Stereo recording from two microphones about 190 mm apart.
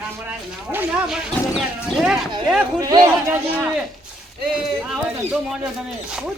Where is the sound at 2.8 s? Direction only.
20° right (ahead or behind).